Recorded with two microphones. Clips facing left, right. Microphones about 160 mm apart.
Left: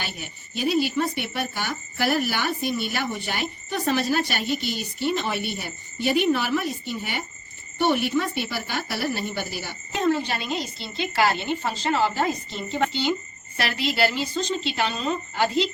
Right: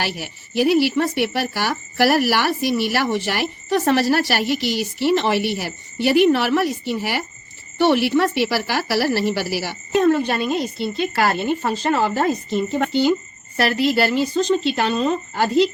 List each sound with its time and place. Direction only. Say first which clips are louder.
0.0 s a woman's voice: right 8 dB; 70° right (ahead or behind)
9.9 s a woman's voice: right 7 dB; 55° right (ahead or behind)